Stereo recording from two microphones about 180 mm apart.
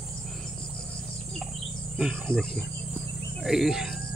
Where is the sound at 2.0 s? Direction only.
5° right (ahead or behind).